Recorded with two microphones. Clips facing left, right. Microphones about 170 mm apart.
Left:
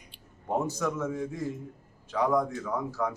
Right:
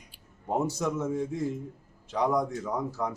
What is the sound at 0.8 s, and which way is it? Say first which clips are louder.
Speech: right 1 dB; 25° right (ahead or behind).